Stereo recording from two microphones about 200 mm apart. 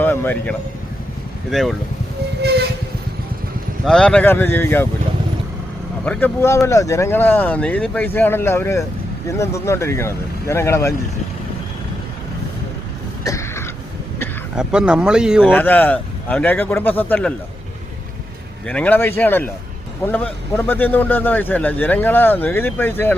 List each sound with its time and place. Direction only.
0.0 s speech: 10° left (ahead or behind)
2.4 s train: 55° right (ahead or behind)
3.8 s speech: 5° left (ahead or behind)
6.1 s speech: 10° left (ahead or behind)
13.2 s throat clearing: 15° left (ahead or behind)
14.5 s speech: 5° right (ahead or behind)
15.5 s speech: 10° left (ahead or behind)
18.6 s speech: 5° left (ahead or behind)